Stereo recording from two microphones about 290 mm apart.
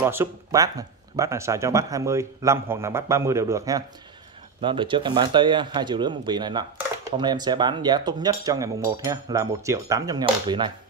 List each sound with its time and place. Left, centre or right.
0.0 s speech: centre